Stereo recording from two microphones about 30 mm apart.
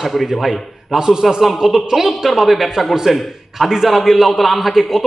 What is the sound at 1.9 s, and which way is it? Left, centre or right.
Speech, centre.